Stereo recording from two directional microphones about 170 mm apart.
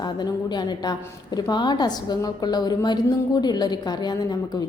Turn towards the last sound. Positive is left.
turn(degrees=25)  # may be behind; listen again after turning